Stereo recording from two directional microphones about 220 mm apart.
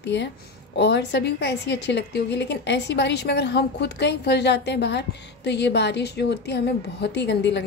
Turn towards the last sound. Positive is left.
turn(degrees=50)  # may be behind; listen again after turning